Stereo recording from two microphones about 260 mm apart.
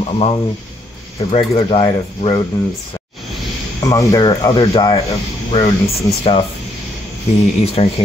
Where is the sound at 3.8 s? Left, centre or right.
Centre.